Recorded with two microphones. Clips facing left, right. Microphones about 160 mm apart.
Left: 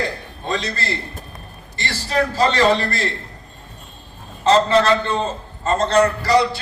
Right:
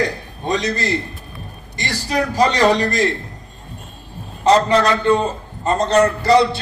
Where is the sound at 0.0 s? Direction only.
20° right (ahead or behind).